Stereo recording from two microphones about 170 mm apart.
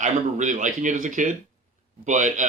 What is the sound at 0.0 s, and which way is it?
Speech, 45° right (ahead or behind).